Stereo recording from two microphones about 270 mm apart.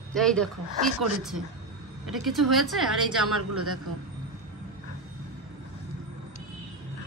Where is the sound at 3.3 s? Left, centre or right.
Right.